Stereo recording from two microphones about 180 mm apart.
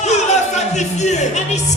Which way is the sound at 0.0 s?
40° left (ahead or behind).